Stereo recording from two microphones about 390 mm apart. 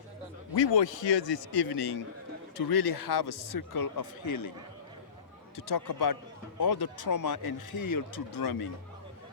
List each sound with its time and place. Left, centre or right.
0.5 s a man's voice: left
2.6 s speech: left
5.5 s speech: left
7.0 s speech: left